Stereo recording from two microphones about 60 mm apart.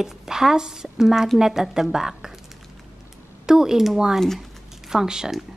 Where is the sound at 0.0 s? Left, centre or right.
Centre.